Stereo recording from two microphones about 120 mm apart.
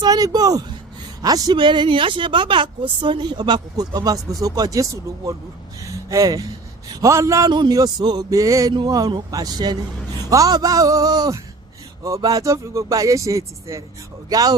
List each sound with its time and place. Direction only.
0.0 s a woman's voice: 30° right (ahead or behind)
5.8 s a sound: 25° right (ahead or behind)
6.9 s a woman's voice: 25° right (ahead or behind)